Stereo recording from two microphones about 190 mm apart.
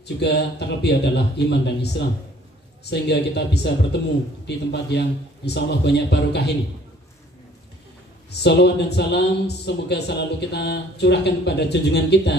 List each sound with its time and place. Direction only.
0.2 s speech: 60° left (ahead or behind)
8.3 s speech: 60° left (ahead or behind)